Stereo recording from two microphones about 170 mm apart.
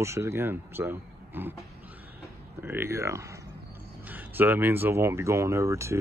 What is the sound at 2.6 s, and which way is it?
Speech, 15° right (ahead or behind).